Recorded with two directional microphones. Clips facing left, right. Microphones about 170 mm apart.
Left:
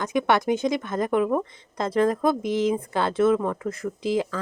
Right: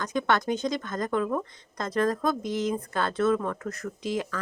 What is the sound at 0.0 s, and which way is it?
Speech, 25° left (ahead or behind).